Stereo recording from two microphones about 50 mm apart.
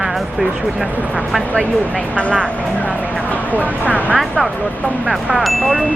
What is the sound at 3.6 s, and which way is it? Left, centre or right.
Speech, right.